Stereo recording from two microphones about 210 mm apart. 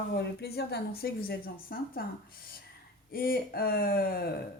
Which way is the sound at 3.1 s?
45° left (ahead or behind).